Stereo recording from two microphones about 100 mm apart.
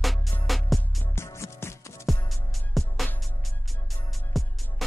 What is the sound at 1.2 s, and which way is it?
Music, 30° left (ahead or behind).